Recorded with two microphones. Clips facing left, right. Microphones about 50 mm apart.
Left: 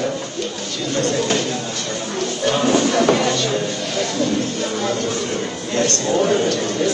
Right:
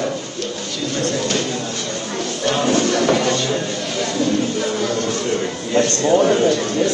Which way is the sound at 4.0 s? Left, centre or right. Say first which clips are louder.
Right 1 dB; centre.